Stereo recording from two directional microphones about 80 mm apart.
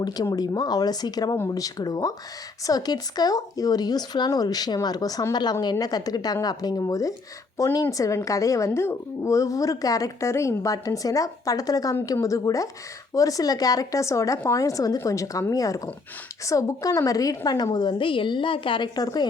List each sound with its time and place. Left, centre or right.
0.0 s a woman's voice: left
17.7 s a woman's voice: left
18.9 s speech: left